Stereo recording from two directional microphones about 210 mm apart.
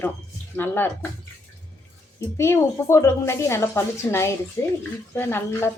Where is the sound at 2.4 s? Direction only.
15° left (ahead or behind).